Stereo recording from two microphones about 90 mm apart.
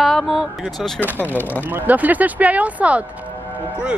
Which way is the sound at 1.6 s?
20° right (ahead or behind).